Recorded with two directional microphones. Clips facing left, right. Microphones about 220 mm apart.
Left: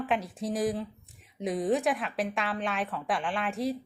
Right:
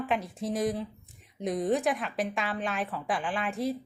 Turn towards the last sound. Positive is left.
turn(degrees=0)  # may be behind; listen again after turning